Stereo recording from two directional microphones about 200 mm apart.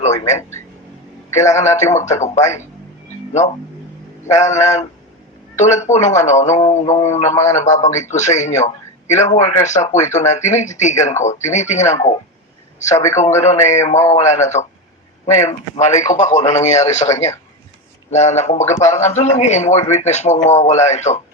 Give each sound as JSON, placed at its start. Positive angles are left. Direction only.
{"t": 1.3, "sound": "speech", "side_deg": 35}
{"t": 4.3, "sound": "speech", "side_deg": 35}
{"t": 7.7, "sound": "speech", "side_deg": 15}
{"t": 8.1, "sound": "speech", "side_deg": 35}
{"t": 13.2, "sound": "speech", "side_deg": 35}